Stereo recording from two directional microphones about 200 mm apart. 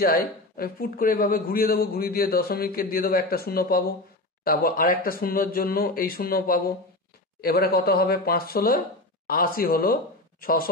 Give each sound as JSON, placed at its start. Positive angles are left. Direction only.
{"t": 0.0, "sound": "a man's voice", "side_deg": 45}